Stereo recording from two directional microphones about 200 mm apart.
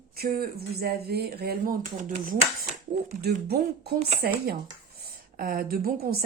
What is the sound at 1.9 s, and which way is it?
Speech, 35° right (ahead or behind).